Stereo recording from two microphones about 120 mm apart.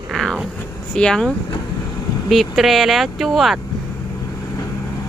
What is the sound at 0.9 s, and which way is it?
Speech, 5° left (ahead or behind).